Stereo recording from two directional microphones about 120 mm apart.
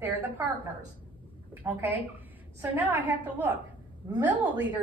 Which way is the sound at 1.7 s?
25° right (ahead or behind).